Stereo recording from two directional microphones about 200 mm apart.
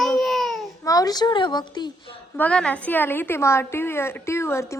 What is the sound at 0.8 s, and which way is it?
A woman's voice, 20° left (ahead or behind).